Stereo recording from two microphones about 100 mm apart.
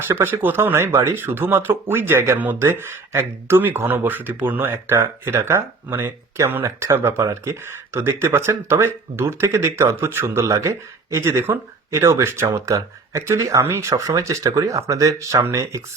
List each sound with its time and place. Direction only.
0.1 s speech: 25° right (ahead or behind)